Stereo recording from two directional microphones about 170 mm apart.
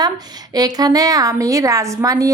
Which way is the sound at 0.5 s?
25° right (ahead or behind).